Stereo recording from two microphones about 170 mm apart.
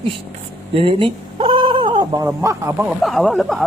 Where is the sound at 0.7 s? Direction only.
30° right (ahead or behind).